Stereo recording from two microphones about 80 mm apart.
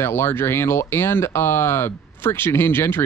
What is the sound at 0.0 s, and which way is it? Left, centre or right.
Speech, left.